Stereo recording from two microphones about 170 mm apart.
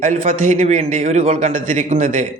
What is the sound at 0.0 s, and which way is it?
A man's voice, 45° right (ahead or behind).